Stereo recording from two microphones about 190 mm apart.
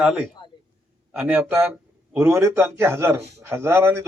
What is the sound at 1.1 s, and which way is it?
Speech, 5° right (ahead or behind).